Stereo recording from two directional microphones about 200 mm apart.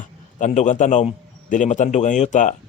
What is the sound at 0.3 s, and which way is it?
A man's voice, 35° left (ahead or behind).